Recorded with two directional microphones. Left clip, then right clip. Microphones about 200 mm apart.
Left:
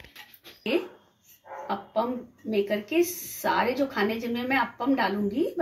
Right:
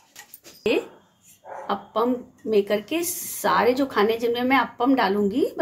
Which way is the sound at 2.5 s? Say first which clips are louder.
Right 5 dB; 55° right (ahead or behind).